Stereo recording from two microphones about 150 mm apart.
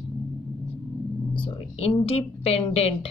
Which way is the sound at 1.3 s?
40° left (ahead or behind).